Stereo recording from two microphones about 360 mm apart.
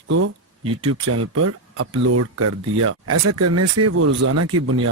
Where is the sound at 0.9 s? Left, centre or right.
Right.